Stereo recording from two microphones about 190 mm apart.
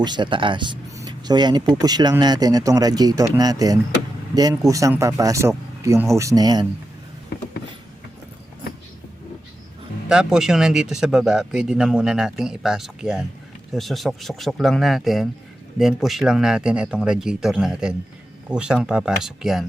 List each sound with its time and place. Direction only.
0.0 s speech: 25° right (ahead or behind)
10.1 s speech: 5° right (ahead or behind)